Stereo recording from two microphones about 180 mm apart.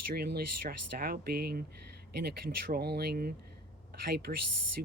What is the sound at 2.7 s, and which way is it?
Speech, 60° right (ahead or behind).